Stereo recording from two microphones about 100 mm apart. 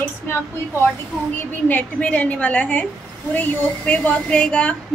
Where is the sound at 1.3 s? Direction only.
20° left (ahead or behind).